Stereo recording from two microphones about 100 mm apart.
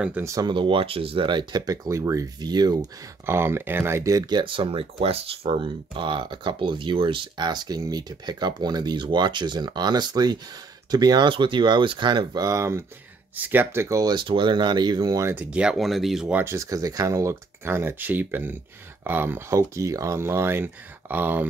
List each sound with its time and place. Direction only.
0.4 s speech: 55° right (ahead or behind)
1.7 s speech: 30° right (ahead or behind)
2.4 s speech: 45° right (ahead or behind)
3.3 s speech: 25° right (ahead or behind)
4.3 s speech: 55° right (ahead or behind)
5.0 s speech: 75° right (ahead or behind); by 14.1 s 30° right (ahead or behind)
14.1 s speech: 55° right (ahead or behind)
15.3 s speech: 10° right (ahead or behind)
16.3 s speech: 20° right (ahead or behind)
16.5 s speech: 35° right (ahead or behind); by 21.5 s 20° right (ahead or behind)